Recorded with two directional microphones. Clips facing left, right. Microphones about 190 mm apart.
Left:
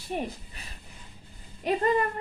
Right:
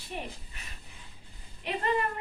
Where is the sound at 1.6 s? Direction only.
40° left (ahead or behind).